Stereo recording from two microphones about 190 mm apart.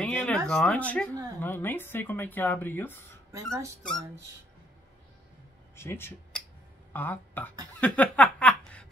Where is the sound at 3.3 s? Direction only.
15° right (ahead or behind).